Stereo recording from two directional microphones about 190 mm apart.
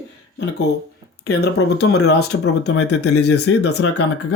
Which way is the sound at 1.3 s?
60° left (ahead or behind).